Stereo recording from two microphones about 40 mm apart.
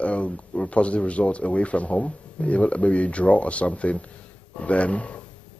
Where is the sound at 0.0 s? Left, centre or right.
Left.